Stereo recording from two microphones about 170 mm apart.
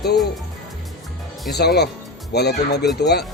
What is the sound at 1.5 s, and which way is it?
Speech, 75° left (ahead or behind).